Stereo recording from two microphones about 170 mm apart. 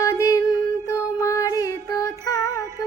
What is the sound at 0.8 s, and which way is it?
Music, 20° left (ahead or behind).